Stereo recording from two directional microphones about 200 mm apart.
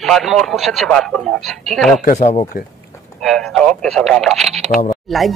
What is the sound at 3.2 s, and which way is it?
A man's voice, centre (ahead or behind).